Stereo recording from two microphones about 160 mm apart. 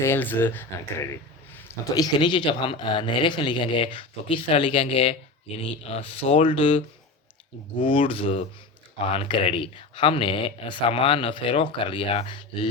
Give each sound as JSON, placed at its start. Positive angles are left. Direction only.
{"t": 0.0, "sound": "speech", "side_deg": 15}